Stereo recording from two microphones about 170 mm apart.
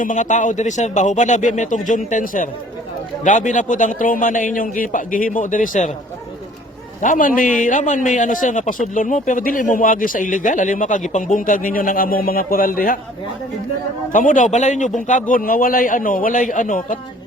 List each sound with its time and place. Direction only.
0.0 s a man's voice: 45° left (ahead or behind)
7.0 s a man's voice: 50° left (ahead or behind)
14.1 s a man's voice: 50° left (ahead or behind)